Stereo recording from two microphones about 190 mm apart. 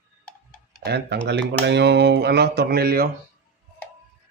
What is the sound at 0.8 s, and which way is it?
Speech, 60° right (ahead or behind).